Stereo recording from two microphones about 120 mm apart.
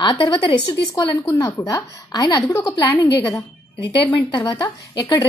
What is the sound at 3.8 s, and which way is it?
A woman's voice, 40° left (ahead or behind).